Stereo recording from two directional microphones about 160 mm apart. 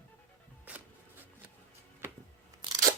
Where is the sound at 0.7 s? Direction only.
10° right (ahead or behind).